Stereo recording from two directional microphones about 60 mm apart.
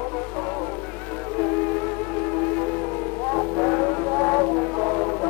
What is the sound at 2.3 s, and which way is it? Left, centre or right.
Music, centre.